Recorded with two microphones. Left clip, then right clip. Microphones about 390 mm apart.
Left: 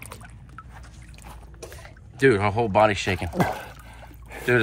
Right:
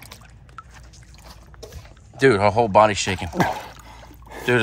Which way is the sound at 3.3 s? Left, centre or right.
Right.